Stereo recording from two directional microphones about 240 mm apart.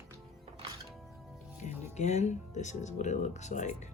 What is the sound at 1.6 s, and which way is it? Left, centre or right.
Speech, left.